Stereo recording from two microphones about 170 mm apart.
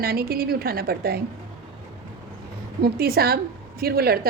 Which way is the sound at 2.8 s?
65° right (ahead or behind).